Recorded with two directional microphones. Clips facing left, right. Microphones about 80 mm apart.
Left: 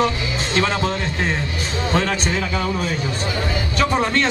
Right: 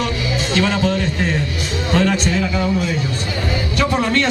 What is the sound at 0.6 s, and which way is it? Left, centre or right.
Speech, left.